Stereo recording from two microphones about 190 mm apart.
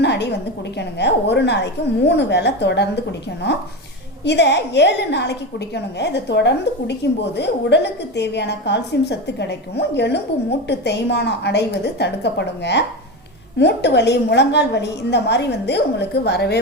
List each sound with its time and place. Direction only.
0.0 s a woman's voice: 60° left (ahead or behind)